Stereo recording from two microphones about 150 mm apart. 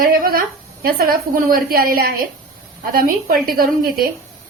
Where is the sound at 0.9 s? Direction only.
80° right.